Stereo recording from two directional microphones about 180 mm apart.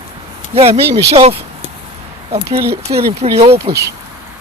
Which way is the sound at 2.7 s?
60° right (ahead or behind).